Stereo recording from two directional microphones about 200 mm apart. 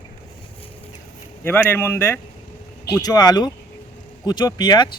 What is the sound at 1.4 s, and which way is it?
Speech, 10° left (ahead or behind).